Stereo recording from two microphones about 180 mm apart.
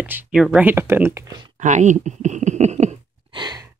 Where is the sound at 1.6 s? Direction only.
40° right (ahead or behind).